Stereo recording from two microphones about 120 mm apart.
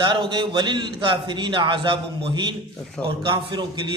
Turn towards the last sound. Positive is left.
turn(degrees=-40)  # may be behind; listen again after turning